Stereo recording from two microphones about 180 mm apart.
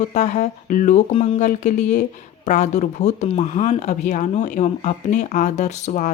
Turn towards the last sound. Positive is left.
turn(degrees=40)  # may be behind; listen again after turning